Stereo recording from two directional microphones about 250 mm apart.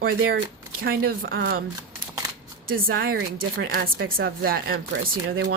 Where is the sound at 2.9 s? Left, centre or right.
Right.